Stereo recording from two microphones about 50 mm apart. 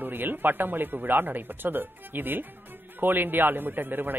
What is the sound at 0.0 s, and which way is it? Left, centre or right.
A man's voice, right.